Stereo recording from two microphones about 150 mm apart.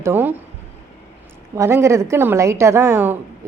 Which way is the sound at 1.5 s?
20° right (ahead or behind).